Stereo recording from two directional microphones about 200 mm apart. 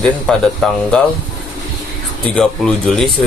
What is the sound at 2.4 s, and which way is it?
Speech, 5° left (ahead or behind).